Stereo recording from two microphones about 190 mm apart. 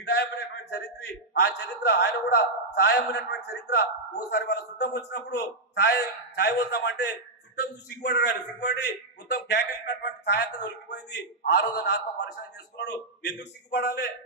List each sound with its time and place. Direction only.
0.0 s a man's voice: 60° left (ahead or behind)